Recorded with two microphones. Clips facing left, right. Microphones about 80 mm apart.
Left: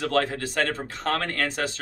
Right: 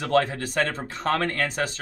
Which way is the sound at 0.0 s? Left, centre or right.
Centre.